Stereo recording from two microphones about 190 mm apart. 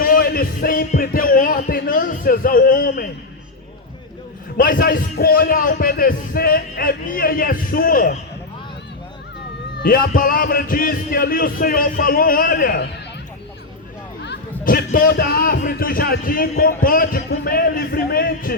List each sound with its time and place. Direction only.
0.0 s music: 50° left (ahead or behind)
4.5 s a man's voice: 50° left (ahead or behind)
9.7 s a man's voice: 50° left (ahead or behind)
14.6 s a man's voice: 50° left (ahead or behind)